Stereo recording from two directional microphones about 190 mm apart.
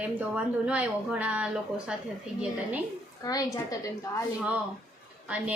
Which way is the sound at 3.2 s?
20° left (ahead or behind).